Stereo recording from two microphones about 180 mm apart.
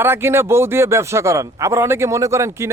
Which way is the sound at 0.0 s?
15° right (ahead or behind).